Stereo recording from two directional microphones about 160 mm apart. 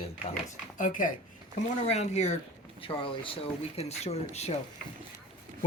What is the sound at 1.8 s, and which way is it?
Speech, 45° left (ahead or behind).